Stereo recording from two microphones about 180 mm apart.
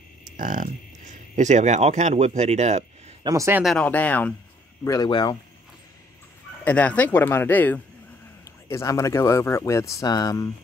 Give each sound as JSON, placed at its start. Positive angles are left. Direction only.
{"t": 0.4, "sound": "speech", "side_deg": -45}
{"t": 3.3, "sound": "speech", "side_deg": -15}
{"t": 3.6, "sound": "speech", "side_deg": 5}
{"t": 4.8, "sound": "speech", "side_deg": 20}
{"t": 6.6, "sound": "speech", "side_deg": 10}